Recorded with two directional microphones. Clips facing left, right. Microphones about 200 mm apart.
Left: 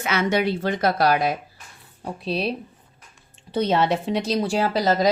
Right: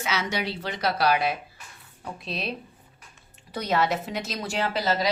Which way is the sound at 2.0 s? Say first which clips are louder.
Left 8 dB; 35° left (ahead or behind).